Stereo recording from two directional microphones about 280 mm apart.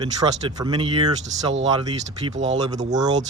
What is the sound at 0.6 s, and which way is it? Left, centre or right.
Speech, centre.